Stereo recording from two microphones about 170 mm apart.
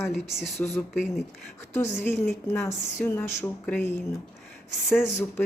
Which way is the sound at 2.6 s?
15° left (ahead or behind).